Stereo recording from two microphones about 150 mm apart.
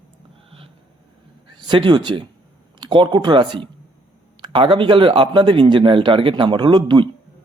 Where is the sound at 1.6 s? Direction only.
30° right (ahead or behind).